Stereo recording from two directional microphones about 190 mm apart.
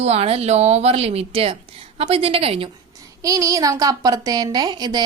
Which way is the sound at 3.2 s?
15° right (ahead or behind).